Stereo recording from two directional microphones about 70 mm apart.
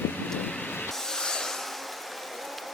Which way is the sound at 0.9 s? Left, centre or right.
Centre.